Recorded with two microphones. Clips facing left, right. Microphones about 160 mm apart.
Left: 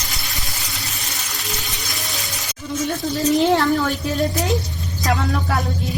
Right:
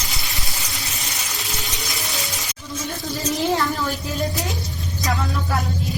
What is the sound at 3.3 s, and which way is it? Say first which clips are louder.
Speech: left 5 dB; 75° left (ahead or behind).